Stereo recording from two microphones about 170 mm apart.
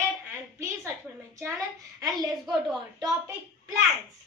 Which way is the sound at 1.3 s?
20° right (ahead or behind).